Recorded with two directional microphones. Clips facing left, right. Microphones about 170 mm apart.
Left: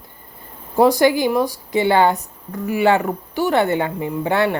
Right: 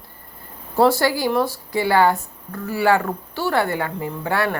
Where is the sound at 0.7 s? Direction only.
15° left (ahead or behind).